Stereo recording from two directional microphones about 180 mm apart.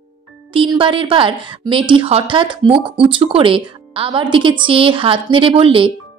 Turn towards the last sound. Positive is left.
turn(degrees=-30)  # may be behind; listen again after turning